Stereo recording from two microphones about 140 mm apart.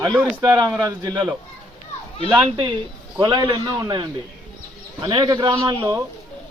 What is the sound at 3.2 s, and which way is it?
A man's voice, 35° right (ahead or behind).